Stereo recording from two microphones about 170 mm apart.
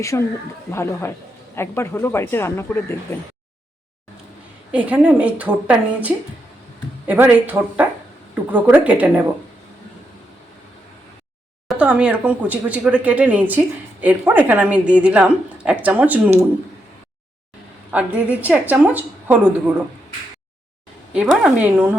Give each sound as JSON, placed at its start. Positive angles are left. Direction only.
{"t": 0.1, "sound": "speech", "side_deg": 15}
{"t": 4.7, "sound": "speech", "side_deg": -10}
{"t": 11.7, "sound": "speech", "side_deg": -5}
{"t": 17.9, "sound": "speech", "side_deg": -10}
{"t": 21.1, "sound": "speech", "side_deg": -5}